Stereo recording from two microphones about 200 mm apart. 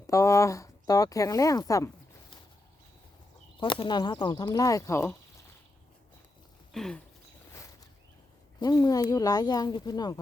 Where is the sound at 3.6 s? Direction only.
25° left (ahead or behind).